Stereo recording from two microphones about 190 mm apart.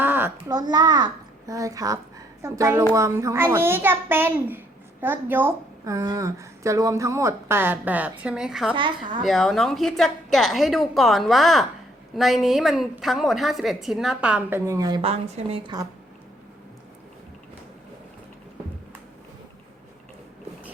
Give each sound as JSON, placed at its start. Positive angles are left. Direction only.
{"t": 0.0, "sound": "a child's voice", "side_deg": -10}
{"t": 8.7, "sound": "a woman's voice", "side_deg": -25}
{"t": 9.2, "sound": "a woman's voice", "side_deg": 0}